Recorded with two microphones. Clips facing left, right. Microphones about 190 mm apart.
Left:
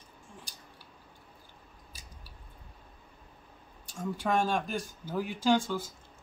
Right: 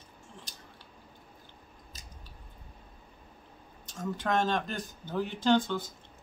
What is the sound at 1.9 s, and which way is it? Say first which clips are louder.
Scissors: right 1 dB; 10° left (ahead or behind).